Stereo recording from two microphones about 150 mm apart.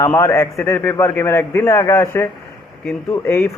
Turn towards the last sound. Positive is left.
turn(degrees=20)  # may be behind; listen again after turning